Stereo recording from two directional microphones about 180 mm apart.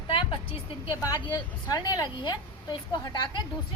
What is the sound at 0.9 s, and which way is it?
A woman's voice, 20° left (ahead or behind).